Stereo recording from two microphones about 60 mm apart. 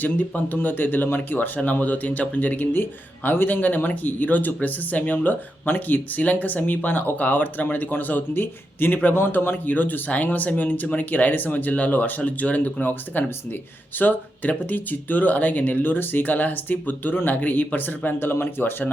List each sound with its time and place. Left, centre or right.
0.0 s speech: left